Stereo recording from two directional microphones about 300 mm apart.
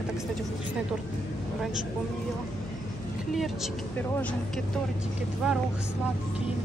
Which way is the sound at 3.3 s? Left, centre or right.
Centre.